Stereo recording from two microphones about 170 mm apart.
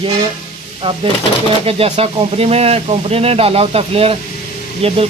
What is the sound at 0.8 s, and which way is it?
Speech, 30° right (ahead or behind).